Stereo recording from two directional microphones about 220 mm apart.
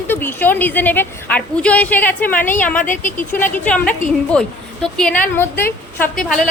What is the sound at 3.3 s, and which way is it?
A woman's voice, 10° left (ahead or behind).